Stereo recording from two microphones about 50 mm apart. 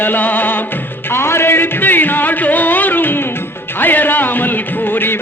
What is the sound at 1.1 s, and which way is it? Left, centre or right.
Music, left.